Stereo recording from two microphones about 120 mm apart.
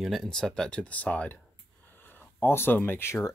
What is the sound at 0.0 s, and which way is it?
Speech, centre (ahead or behind).